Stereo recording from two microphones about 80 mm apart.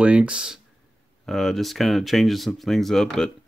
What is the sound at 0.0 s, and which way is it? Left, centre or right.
Speech, centre.